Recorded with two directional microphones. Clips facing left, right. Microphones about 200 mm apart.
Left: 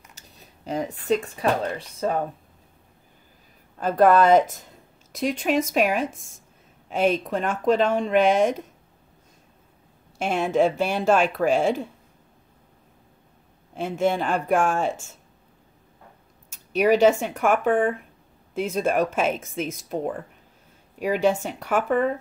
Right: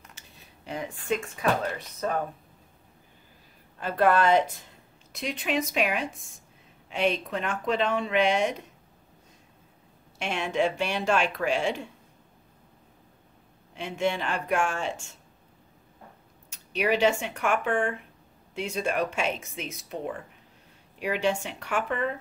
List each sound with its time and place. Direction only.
0.1 s speech: 40° left (ahead or behind)
3.8 s speech: 45° left (ahead or behind)
5.7 s speech: 45° left (ahead or behind)
10.1 s speech: 40° left (ahead or behind)
13.7 s speech: 45° left (ahead or behind)
16.7 s speech: 45° left (ahead or behind)